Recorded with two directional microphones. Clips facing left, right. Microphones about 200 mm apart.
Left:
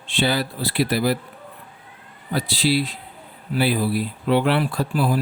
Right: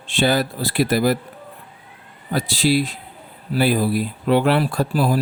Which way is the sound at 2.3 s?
45° right (ahead or behind).